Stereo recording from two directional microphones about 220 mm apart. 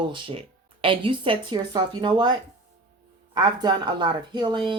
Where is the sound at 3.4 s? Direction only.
20° right (ahead or behind).